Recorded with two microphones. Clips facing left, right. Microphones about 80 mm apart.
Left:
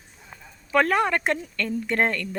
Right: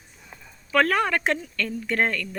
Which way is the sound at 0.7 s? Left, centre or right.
Centre.